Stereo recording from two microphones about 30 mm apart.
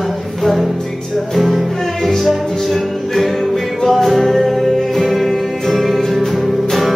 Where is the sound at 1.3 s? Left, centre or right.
Centre.